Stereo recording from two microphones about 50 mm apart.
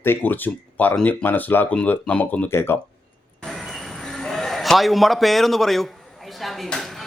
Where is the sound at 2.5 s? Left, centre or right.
Left.